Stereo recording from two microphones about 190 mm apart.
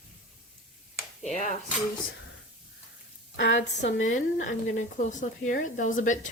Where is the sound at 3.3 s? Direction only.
70° left (ahead or behind).